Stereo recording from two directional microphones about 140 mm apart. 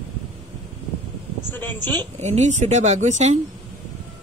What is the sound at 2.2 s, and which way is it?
Speech, 55° right (ahead or behind).